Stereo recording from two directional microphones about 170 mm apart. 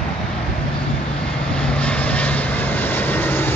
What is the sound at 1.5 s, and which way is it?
Vehicle, 5° left (ahead or behind).